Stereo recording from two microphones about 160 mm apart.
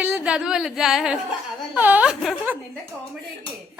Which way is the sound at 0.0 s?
5° right (ahead or behind).